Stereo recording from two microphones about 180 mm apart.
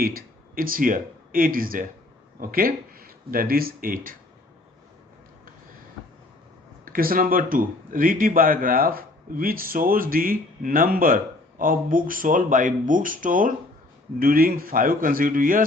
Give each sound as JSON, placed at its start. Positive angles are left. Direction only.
{"t": 0.0, "sound": "speech", "side_deg": -55}
{"t": 6.8, "sound": "speech", "side_deg": -55}